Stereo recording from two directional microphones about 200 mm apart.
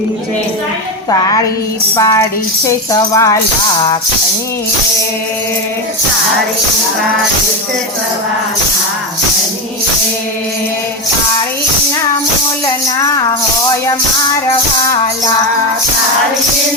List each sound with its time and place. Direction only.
2.0 s speech: 15° left (ahead or behind)
12.6 s speech: 15° left (ahead or behind)